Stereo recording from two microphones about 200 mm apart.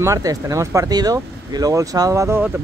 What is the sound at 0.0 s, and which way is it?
Speech, 15° right (ahead or behind).